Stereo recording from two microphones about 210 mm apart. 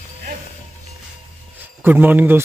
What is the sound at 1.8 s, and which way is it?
Speech, 10° right (ahead or behind).